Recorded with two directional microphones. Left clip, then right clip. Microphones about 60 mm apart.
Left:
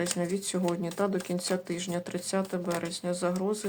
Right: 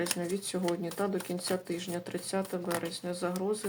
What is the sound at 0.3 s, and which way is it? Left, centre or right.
Speech, left.